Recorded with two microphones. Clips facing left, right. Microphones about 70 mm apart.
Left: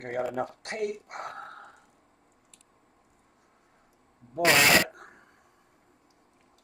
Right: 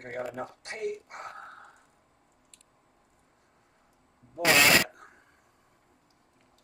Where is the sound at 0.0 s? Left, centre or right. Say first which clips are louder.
Left 5 dB; left.